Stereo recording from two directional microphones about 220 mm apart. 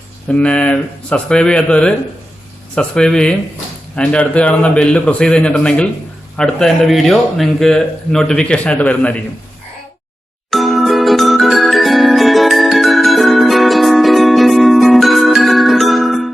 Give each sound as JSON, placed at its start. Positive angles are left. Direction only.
{"t": 0.3, "sound": "a man's voice", "side_deg": 5}
{"t": 10.5, "sound": "music", "side_deg": 0}